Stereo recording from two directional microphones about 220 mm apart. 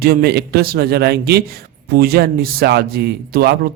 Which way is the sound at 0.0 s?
45° right (ahead or behind).